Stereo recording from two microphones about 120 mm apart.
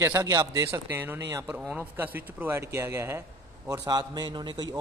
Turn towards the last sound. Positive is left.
turn(degrees=-40)  # may be behind; listen again after turning